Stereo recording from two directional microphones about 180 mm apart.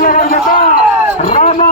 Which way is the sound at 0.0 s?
50° left (ahead or behind).